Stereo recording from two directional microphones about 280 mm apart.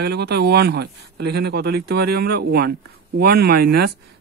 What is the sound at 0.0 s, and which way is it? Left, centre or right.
Speech, right.